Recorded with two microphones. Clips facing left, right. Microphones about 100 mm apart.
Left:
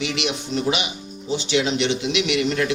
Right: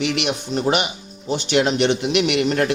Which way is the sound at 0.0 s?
55° right (ahead or behind).